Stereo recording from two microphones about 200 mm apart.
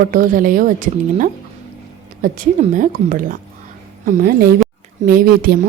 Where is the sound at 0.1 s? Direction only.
45° right (ahead or behind).